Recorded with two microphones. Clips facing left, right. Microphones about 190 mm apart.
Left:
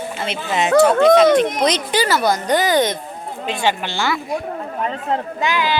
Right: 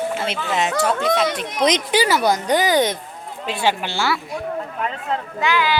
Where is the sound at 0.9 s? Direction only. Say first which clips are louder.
Left 8 dB; 55° left (ahead or behind).